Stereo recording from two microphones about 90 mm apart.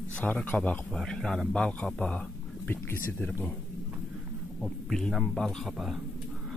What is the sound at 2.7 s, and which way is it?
Speech, 25° left (ahead or behind).